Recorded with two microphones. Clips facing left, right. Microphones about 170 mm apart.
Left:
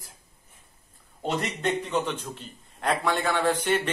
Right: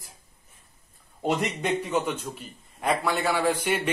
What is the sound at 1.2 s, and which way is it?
A man's voice, 10° right (ahead or behind).